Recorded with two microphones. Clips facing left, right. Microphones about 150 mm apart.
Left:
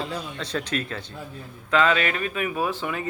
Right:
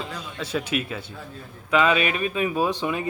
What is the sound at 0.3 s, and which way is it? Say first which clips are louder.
A man's voice: right 4 dB; 5° right (ahead or behind).